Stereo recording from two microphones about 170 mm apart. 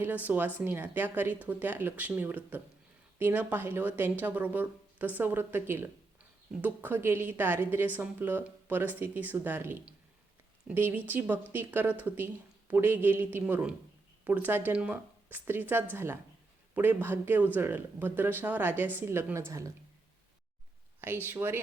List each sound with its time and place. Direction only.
0.0 s speech: 10° right (ahead or behind)
21.2 s speech: 15° right (ahead or behind)